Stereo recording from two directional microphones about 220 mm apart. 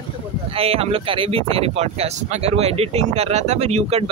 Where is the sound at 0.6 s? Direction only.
25° right (ahead or behind).